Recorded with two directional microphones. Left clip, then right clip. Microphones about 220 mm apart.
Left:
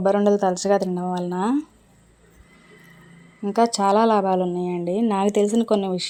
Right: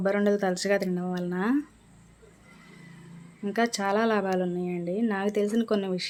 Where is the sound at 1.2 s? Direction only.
10° right (ahead or behind).